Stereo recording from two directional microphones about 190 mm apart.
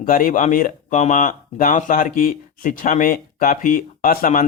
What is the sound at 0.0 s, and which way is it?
Speech, 45° left (ahead or behind).